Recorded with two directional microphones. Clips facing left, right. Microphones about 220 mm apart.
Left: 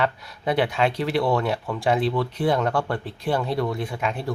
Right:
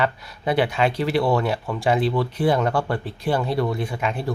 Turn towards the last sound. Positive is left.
turn(degrees=0)  # may be behind; listen again after turning